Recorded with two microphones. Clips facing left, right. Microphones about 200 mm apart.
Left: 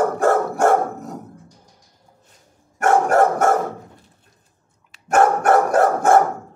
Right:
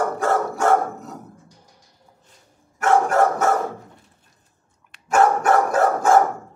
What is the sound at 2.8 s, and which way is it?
Dog, 55° left (ahead or behind).